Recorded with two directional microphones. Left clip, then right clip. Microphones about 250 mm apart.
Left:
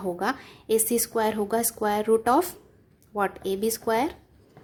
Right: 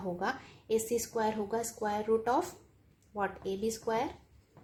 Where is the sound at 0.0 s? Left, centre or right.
Left.